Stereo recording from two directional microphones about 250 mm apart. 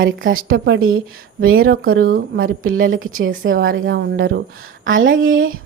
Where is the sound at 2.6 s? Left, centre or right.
Right.